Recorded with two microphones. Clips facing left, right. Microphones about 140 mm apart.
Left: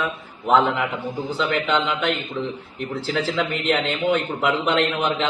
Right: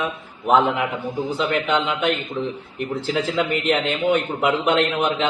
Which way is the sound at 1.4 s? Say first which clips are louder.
Even; 15° right (ahead or behind).